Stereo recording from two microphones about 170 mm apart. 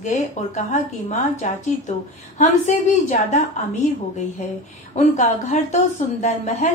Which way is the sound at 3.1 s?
45° left (ahead or behind).